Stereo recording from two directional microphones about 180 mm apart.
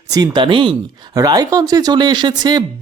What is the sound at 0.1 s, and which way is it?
Speech, 25° right (ahead or behind).